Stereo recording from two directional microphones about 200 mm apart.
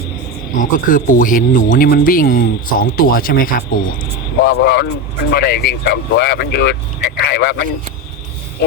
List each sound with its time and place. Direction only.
0.5 s speech: 40° left (ahead or behind)
4.4 s speech: 55° left (ahead or behind)